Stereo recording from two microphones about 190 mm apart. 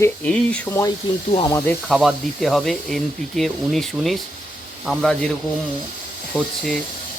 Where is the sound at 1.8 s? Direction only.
Centre (ahead or behind).